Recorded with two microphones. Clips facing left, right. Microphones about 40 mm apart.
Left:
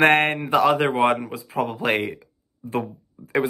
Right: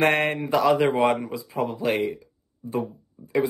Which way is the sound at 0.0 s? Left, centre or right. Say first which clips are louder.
Left 4 dB; left.